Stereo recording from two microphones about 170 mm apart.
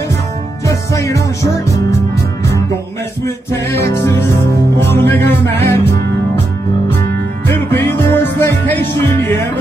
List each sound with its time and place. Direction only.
0.7 s music: 20° left (ahead or behind)
3.9 s music: 15° left (ahead or behind)
7.7 s music: 15° left (ahead or behind)